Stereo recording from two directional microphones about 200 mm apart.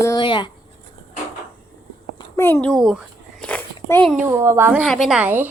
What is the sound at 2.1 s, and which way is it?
Speech, 15° left (ahead or behind).